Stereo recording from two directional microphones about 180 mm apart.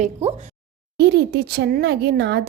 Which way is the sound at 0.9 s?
70° right (ahead or behind).